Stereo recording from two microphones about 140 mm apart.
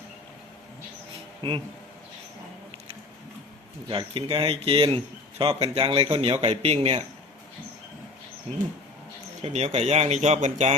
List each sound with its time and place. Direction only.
1.4 s a man's voice: 40° right (ahead or behind)
3.8 s a man's voice: 35° right (ahead or behind)
9.4 s a man's voice: 50° right (ahead or behind)